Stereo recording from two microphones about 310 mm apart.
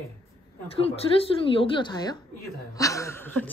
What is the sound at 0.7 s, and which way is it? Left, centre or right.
A woman's voice, centre.